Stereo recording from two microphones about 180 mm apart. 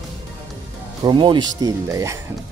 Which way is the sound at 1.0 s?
25° right (ahead or behind).